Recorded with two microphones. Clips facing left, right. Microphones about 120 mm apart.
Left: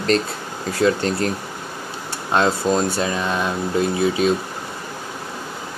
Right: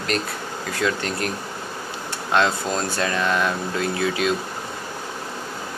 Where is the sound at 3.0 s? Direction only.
20° left (ahead or behind).